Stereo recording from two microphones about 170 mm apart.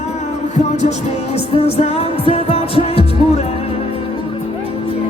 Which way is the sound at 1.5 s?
35° left (ahead or behind).